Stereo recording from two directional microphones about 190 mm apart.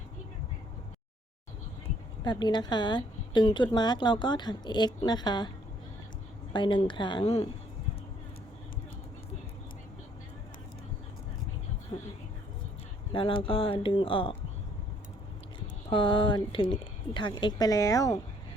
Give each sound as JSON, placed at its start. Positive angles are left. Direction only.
{"t": 2.2, "sound": "a woman's voice", "side_deg": 25}
{"t": 6.5, "sound": "a woman's voice", "side_deg": 25}
{"t": 13.1, "sound": "a woman's voice", "side_deg": 25}
{"t": 15.9, "sound": "a woman's voice", "side_deg": 25}